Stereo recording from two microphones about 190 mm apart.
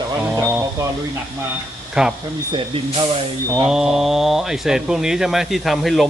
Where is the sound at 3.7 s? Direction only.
Centre (ahead or behind).